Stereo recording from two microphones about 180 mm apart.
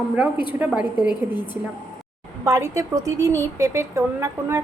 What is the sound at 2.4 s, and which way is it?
A woman's voice, 15° right (ahead or behind).